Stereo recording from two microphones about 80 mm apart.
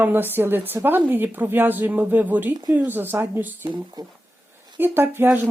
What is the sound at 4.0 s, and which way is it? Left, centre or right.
Speech, right.